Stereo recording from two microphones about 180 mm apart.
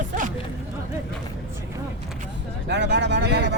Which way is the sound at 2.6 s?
70° right (ahead or behind).